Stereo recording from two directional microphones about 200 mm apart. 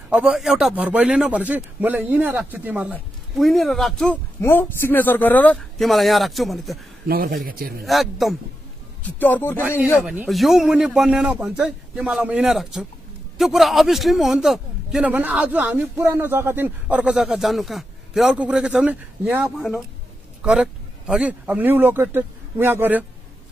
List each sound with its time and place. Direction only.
0.1 s a man's voice: 5° right (ahead or behind)
7.1 s speech: 45° right (ahead or behind)
7.8 s a man's voice: centre (ahead or behind)
9.2 s speech: 10° left (ahead or behind)
9.9 s a man's voice: 5° right (ahead or behind)